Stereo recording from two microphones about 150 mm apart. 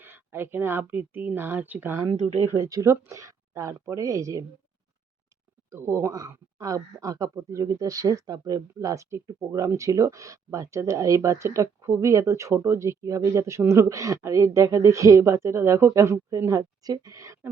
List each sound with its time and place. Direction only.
0.0 s speech: 15° right (ahead or behind)
2.1 s speech: 55° right (ahead or behind)
2.5 s speech: 20° right (ahead or behind)
5.7 s speech: 15° right (ahead or behind)